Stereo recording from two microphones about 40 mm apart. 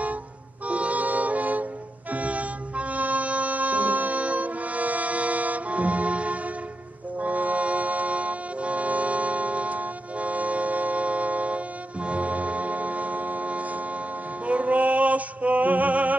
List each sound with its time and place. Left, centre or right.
0.7 s music: right